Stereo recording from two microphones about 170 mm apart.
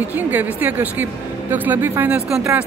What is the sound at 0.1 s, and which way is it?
Speech, 10° right (ahead or behind).